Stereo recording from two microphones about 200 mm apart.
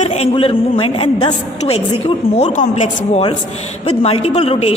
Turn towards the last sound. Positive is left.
turn(degrees=30)  # may be behind; listen again after turning